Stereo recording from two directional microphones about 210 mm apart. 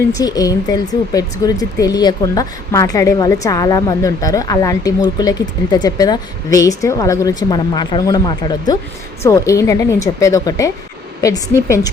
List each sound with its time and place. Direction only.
0.1 s speech: 20° left (ahead or behind)